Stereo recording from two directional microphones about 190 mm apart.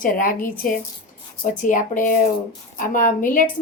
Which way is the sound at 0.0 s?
45° left (ahead or behind).